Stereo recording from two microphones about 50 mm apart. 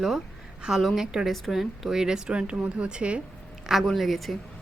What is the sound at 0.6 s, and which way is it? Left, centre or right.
A woman's voice, centre.